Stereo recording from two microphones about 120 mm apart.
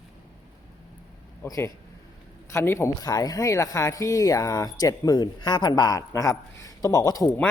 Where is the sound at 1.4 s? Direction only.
20° left (ahead or behind).